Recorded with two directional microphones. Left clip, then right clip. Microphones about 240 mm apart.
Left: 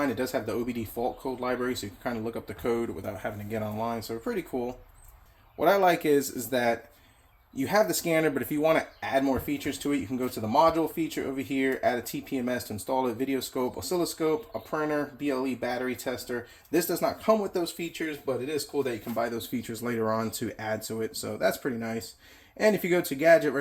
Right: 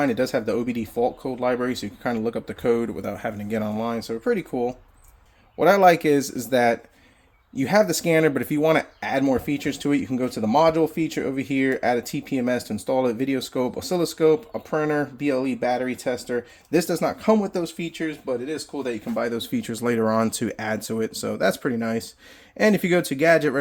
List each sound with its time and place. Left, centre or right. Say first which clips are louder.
0.0 s speech: right 6 dB; right